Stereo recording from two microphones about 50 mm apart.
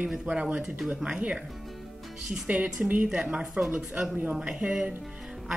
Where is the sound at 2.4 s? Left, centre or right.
Right.